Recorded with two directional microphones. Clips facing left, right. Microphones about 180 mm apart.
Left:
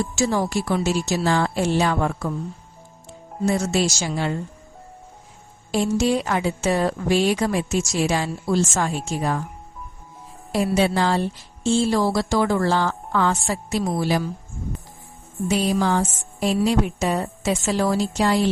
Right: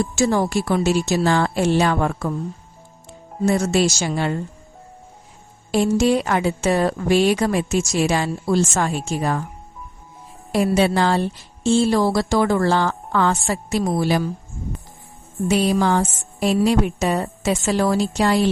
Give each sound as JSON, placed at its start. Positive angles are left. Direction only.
{"t": 0.2, "sound": "a woman's voice", "side_deg": -55}
{"t": 3.4, "sound": "a woman's voice", "side_deg": -55}
{"t": 5.7, "sound": "a woman's voice", "side_deg": -60}
{"t": 10.5, "sound": "a woman's voice", "side_deg": -65}
{"t": 15.4, "sound": "a woman's voice", "side_deg": -65}